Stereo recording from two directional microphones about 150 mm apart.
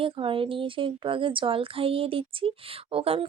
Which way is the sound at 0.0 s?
35° right (ahead or behind).